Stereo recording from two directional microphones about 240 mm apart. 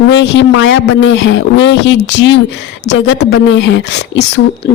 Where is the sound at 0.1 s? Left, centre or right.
Left.